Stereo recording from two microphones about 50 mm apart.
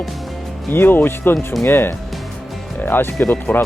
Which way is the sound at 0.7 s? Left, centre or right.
Left.